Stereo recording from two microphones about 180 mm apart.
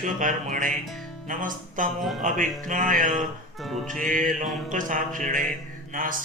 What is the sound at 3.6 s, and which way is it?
Music, centre (ahead or behind).